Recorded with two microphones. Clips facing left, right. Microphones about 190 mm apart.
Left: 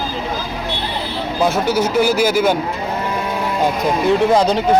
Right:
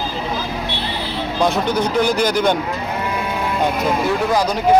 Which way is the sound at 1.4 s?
5° left (ahead or behind).